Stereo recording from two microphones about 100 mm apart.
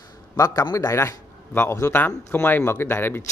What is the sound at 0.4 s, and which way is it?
Speech, 35° left (ahead or behind).